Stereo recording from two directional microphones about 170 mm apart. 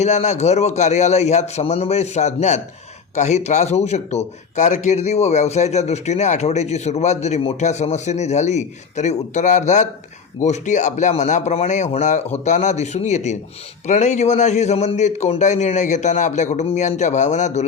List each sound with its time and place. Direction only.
0.0 s a man's voice: 40° left (ahead or behind)